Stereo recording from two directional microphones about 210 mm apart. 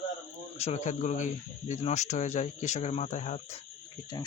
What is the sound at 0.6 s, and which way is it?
Speech, 30° left (ahead or behind).